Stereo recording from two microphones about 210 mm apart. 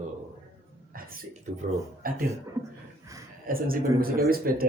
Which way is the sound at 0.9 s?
45° right (ahead or behind).